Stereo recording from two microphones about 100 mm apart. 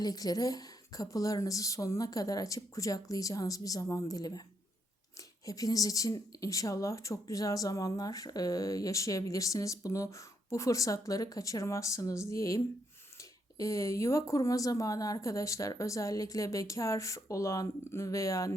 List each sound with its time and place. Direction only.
0.0 s speech: 40° left (ahead or behind)
5.5 s speech: 35° left (ahead or behind)